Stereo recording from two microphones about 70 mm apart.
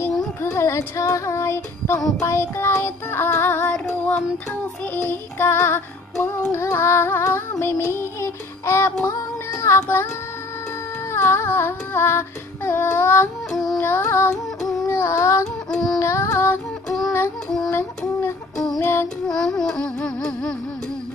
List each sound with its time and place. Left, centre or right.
0.4 s child singing: left
9.6 s carnatic music: left
11.1 s child singing: left
13.5 s child singing: centre
13.7 s child singing: left
15.7 s music: centre
16.0 s child singing: left
17.6 s child singing: left
19.2 s music: centre